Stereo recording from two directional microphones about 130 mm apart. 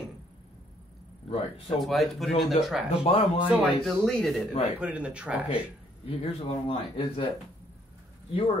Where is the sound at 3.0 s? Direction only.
45° left (ahead or behind).